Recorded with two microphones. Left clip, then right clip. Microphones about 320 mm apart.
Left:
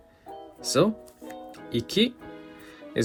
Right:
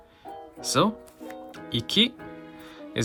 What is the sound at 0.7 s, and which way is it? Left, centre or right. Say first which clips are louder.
Music: even; right.